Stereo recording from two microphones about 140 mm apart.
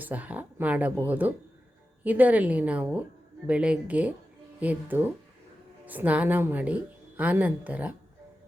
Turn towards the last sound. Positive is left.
turn(degrees=-10)  # may be behind; listen again after turning